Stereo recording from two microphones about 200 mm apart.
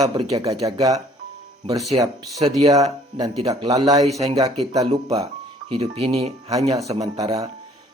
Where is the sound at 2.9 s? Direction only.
30° right (ahead or behind).